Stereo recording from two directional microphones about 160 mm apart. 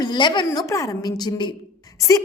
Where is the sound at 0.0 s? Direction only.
30° left (ahead or behind).